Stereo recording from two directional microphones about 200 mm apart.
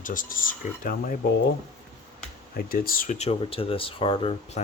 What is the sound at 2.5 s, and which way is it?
Speech, 50° left (ahead or behind).